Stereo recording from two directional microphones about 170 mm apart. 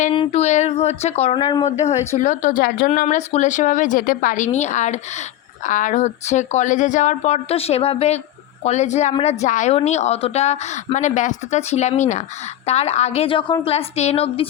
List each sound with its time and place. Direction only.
0.1 s a woman's voice: 35° left (ahead or behind)
2.1 s a woman's voice: 45° left (ahead or behind)